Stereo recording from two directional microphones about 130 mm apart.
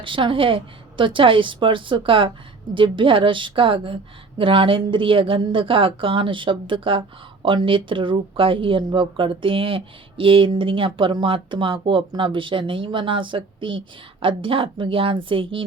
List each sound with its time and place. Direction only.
0.0 s speech: 40° right (ahead or behind)